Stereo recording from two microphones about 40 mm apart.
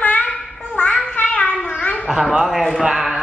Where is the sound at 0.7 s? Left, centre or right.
Left.